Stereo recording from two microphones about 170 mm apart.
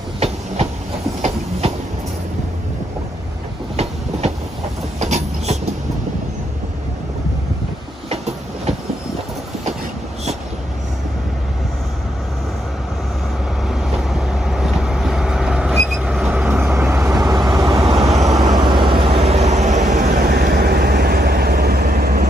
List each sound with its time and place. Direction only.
5.0 s train: 40° right (ahead or behind)
8.1 s train: 40° right (ahead or behind)
13.7 s vehicle: centre (ahead or behind); by 20.2 s 45° right (ahead or behind)
20.2 s vehicle: 60° right (ahead or behind)